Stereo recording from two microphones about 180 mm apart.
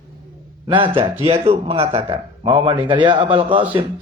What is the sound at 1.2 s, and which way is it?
Speech, 30° right (ahead or behind).